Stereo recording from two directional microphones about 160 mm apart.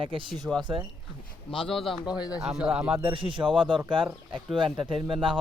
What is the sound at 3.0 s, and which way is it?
Speech, 35° right (ahead or behind).